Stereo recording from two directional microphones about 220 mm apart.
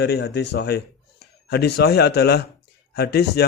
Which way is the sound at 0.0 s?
50° left (ahead or behind).